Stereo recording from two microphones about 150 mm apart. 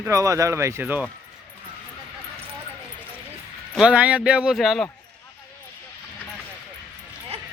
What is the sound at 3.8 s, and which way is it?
Speech, 5° right (ahead or behind).